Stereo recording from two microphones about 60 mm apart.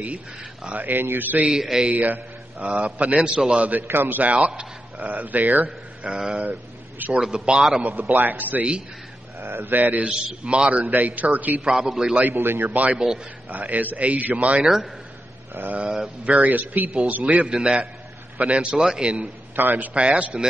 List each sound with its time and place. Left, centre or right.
0.7 s a man's voice: right
1.4 s a man's voice: centre
1.9 s a man's voice: right
3.8 s a man's voice: right
6.0 s a man's voice: centre
7.8 s a man's voice: right
9.4 s a man's voice: right
10.0 s a man's voice: centre
10.9 s a man's voice: right
11.8 s a man's voice: centre
12.2 s a man's voice: right
12.9 s a man's voice: centre
13.5 s a man's voice: right
19.5 s a man's voice: right